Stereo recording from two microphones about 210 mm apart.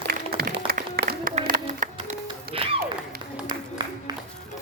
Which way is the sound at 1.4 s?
35° right (ahead or behind).